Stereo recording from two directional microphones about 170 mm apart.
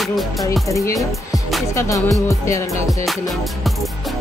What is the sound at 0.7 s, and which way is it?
Speech, 20° left (ahead or behind).